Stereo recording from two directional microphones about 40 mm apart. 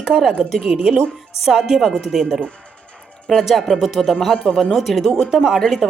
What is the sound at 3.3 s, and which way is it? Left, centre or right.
Speech, centre.